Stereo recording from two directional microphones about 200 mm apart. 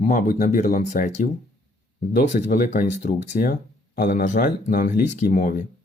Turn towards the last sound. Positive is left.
turn(degrees=40)  # may be behind; listen again after turning